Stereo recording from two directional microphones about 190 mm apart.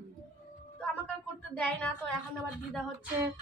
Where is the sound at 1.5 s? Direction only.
5° left (ahead or behind).